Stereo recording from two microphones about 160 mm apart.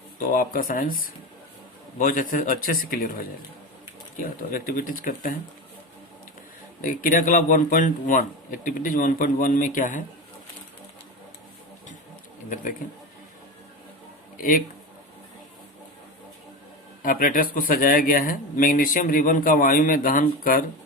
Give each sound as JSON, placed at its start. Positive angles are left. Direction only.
{"t": 0.3, "sound": "speech", "side_deg": 60}
{"t": 4.5, "sound": "speech", "side_deg": 60}
{"t": 6.8, "sound": "speech", "side_deg": 60}
{"t": 17.0, "sound": "speech", "side_deg": 60}